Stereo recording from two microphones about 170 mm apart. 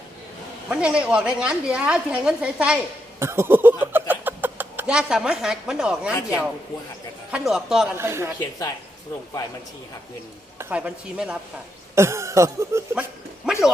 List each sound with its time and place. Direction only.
0.7 s a woman's voice: 5° right (ahead or behind)
7.3 s a man's voice: 5° right (ahead or behind)
7.9 s speech: 15° right (ahead or behind)
8.4 s speech: 20° left (ahead or behind)
10.6 s speech: 10° right (ahead or behind)